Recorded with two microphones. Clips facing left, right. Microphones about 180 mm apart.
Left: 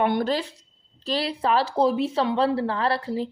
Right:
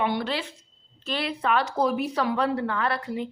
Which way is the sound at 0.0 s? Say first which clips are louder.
Left 4 dB; 50° left (ahead or behind).